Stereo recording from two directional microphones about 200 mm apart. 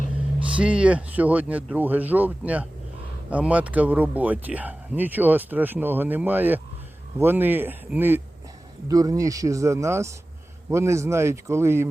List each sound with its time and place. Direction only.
0.5 s speech: 5° right (ahead or behind)